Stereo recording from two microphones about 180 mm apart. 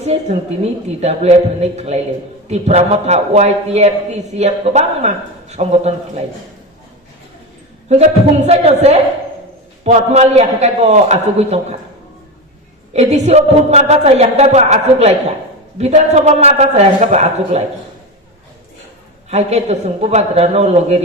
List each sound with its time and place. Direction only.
0.0 s a man's voice: 35° right (ahead or behind)
8.4 s a man's voice: 35° right (ahead or behind)
12.9 s a man's voice: 40° right (ahead or behind)
19.3 s a man's voice: 40° right (ahead or behind)